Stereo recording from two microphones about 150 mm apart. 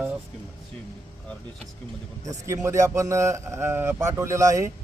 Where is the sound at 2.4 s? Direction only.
20° right (ahead or behind).